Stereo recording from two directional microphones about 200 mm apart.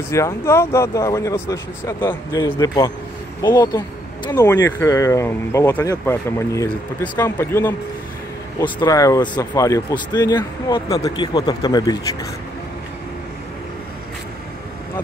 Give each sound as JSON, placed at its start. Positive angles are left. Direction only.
{"t": 0.1, "sound": "speech", "side_deg": 15}